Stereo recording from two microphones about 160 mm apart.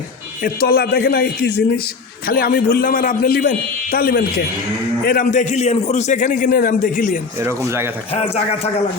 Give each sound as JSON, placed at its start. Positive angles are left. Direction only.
{"t": 0.4, "sound": "a man's voice", "side_deg": 70}
{"t": 2.2, "sound": "a man's voice", "side_deg": 65}
{"t": 7.3, "sound": "speech", "side_deg": -15}
{"t": 8.1, "sound": "speech", "side_deg": 40}